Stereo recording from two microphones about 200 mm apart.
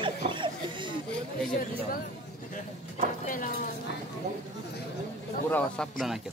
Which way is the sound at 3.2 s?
40° left (ahead or behind).